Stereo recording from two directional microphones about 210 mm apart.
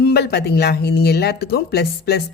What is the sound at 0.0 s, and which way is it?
A woman's voice, 50° left (ahead or behind).